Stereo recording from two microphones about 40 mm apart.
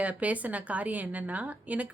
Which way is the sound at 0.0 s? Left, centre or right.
Right.